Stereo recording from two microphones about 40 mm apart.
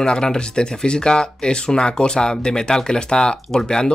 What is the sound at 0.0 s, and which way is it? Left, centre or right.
Speech, centre.